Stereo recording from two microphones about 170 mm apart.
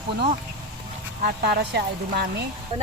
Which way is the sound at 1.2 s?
70° right (ahead or behind).